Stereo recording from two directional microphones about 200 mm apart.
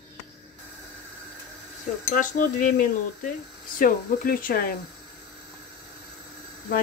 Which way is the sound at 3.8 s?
45° left (ahead or behind).